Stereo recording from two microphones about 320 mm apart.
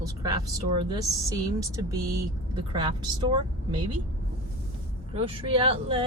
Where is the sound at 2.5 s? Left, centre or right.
Centre.